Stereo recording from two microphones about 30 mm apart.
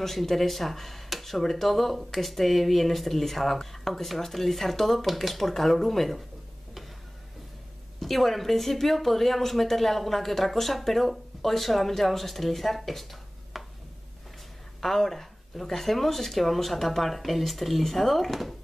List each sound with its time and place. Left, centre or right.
0.0 s a woman's voice: centre
8.0 s a woman's voice: centre
14.8 s a sound: centre
15.6 s a woman's voice: centre